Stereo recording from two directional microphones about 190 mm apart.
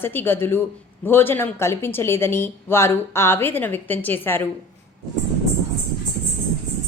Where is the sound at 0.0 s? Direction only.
10° left (ahead or behind).